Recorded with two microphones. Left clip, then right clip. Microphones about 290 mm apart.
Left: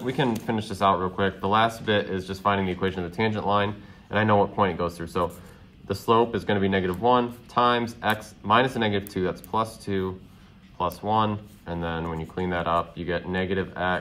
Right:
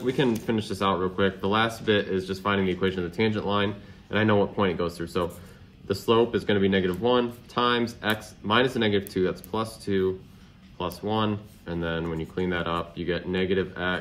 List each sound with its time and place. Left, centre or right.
0.0 s speech: left